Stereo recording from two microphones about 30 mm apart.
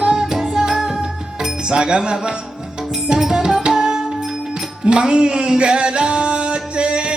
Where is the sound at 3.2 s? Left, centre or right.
Centre.